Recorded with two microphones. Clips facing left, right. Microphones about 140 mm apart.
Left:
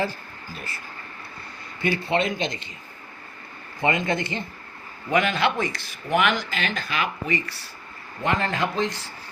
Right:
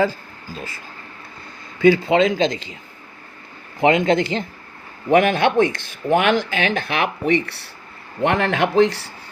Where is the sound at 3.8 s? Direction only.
90° right.